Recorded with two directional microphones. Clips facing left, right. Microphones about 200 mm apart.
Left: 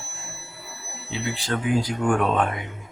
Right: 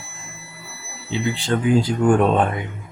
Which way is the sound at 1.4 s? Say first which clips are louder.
Right 5 dB; 25° right (ahead or behind).